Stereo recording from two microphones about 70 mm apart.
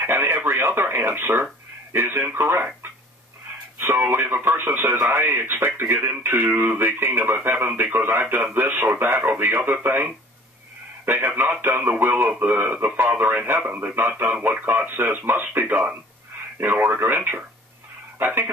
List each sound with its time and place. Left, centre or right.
0.0 s radio: right
1.9 s speech: right
11.1 s speech: right